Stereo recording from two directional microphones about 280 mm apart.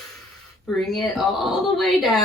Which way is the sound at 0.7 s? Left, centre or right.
Centre.